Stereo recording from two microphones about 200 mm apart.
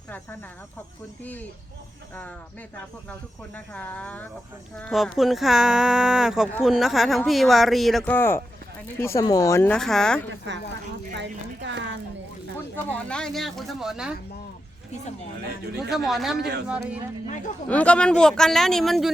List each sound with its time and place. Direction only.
1.2 s speech: 10° left (ahead or behind)
3.1 s speech: 10° left (ahead or behind)
11.2 s speech: 65° right (ahead or behind)
12.7 s speech: 5° left (ahead or behind)
15.9 s speech: centre (ahead or behind)
16.4 s speech: 55° right (ahead or behind)
16.6 s speech: 5° right (ahead or behind)
17.7 s speech: 5° left (ahead or behind)